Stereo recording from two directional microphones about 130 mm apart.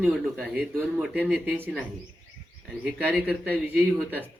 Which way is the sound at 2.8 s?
5° right (ahead or behind).